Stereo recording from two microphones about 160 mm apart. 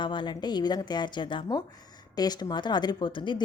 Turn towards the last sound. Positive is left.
turn(degrees=30)  # may be behind; listen again after turning